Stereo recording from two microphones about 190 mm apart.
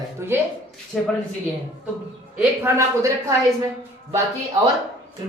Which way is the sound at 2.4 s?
15° right (ahead or behind).